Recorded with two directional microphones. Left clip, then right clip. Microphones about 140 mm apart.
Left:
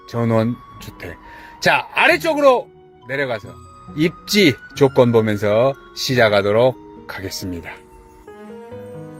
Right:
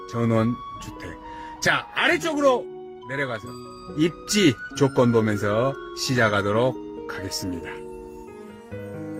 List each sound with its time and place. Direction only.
0.1 s speech: 25° left (ahead or behind)
1.6 s speech: 25° left (ahead or behind)